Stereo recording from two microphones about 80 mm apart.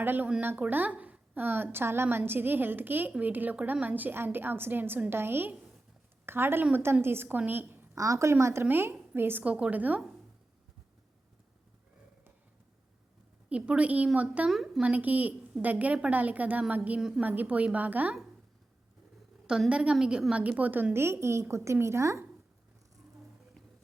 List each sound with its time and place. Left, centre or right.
0.0 s a woman's voice: right
7.9 s a woman's voice: right
9.4 s a woman's voice: centre
13.5 s a woman's voice: centre
14.5 s a woman's voice: centre
14.8 s a woman's voice: centre
19.5 s a woman's voice: centre; by 22.2 s right